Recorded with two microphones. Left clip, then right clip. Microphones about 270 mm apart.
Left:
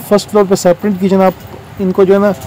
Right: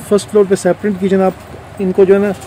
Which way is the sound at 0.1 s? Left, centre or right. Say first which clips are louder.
Left 1 dB; centre.